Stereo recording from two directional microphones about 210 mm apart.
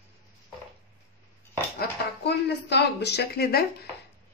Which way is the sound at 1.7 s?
55° left (ahead or behind).